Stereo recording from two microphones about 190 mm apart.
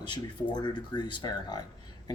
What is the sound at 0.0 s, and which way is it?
Speech, 25° left (ahead or behind).